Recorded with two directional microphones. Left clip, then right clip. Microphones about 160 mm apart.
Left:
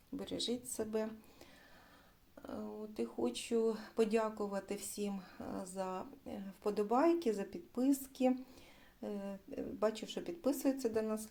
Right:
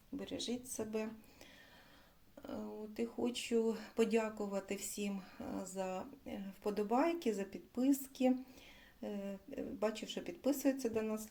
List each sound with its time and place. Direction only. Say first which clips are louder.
0.2 s speech: left 3 dB; 30° left (ahead or behind)
2.5 s speech: left 1 dB; 10° left (ahead or behind)